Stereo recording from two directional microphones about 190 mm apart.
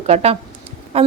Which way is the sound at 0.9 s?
35° right (ahead or behind).